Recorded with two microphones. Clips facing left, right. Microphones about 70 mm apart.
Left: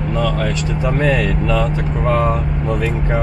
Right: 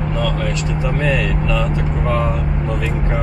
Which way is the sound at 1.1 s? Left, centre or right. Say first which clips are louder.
Left 2 dB; left.